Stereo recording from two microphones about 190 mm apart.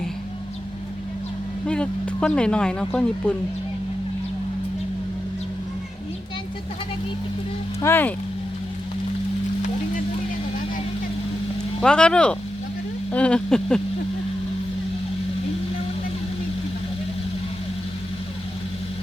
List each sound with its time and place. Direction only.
1.6 s speech: 5° left (ahead or behind)
7.8 s speech: 10° left (ahead or behind)
11.8 s speech: 5° left (ahead or behind)